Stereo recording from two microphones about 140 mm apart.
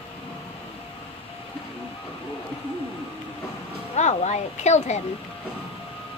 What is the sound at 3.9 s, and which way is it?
Speech, 55° left (ahead or behind).